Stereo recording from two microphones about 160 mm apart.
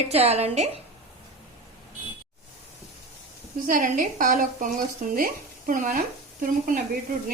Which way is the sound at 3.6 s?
60° right (ahead or behind).